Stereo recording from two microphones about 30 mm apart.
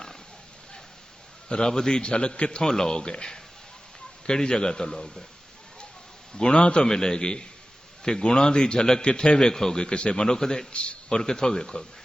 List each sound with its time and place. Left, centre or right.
1.5 s a man's voice: left
2.9 s a man's voice: left
6.3 s a man's voice: left
6.8 s a man's voice: left
9.5 s a man's voice: centre
9.8 s a man's voice: left
10.7 s a man's voice: left
11.2 s a man's voice: left